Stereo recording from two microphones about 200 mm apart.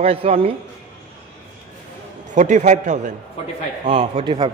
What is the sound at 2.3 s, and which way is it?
A man's voice, 40° right (ahead or behind).